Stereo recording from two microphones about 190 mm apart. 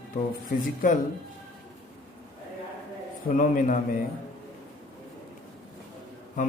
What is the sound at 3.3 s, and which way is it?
Speech, 45° left (ahead or behind).